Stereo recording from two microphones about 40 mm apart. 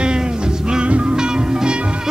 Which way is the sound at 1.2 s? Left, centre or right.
Centre.